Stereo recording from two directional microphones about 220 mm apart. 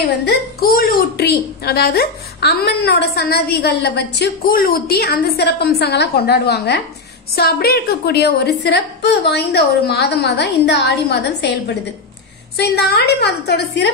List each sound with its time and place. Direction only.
0.2 s a woman's voice: 45° left (ahead or behind)
12.5 s a woman's voice: 45° left (ahead or behind)